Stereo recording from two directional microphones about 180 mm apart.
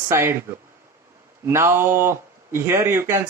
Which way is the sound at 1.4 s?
15° right (ahead or behind).